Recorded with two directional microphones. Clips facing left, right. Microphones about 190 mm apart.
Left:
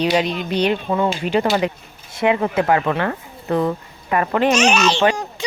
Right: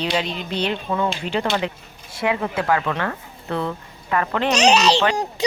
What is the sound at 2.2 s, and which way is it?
A woman's voice, 25° left (ahead or behind).